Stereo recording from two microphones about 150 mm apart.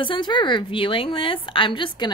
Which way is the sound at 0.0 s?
30° left (ahead or behind).